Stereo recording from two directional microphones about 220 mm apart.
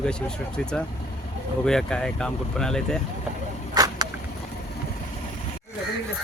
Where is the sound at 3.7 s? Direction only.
15° right (ahead or behind).